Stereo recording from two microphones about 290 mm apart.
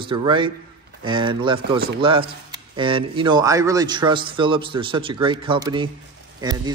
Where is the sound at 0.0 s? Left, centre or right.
Centre.